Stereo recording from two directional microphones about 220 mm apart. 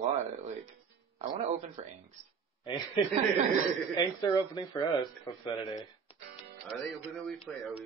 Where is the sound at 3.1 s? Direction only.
30° right (ahead or behind).